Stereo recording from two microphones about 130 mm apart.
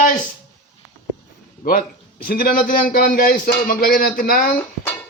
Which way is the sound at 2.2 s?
90° left.